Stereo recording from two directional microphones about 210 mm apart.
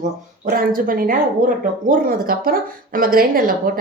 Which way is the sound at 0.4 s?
45° right (ahead or behind).